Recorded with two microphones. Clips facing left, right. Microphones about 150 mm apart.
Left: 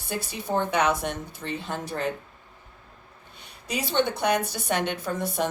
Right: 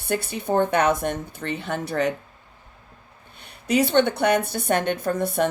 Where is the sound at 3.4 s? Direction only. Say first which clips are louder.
Right 11 dB; 60° right (ahead or behind).